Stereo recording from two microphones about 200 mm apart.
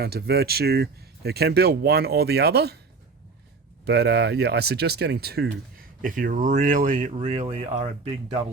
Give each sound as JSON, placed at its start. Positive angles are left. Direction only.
{"t": 0.0, "sound": "speech", "side_deg": -50}
{"t": 3.8, "sound": "speech", "side_deg": -55}